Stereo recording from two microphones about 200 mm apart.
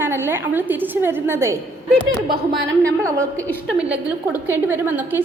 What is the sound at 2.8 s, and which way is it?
Speech, 15° right (ahead or behind).